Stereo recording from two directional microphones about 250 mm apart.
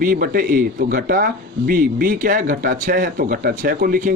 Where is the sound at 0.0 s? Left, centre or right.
Right.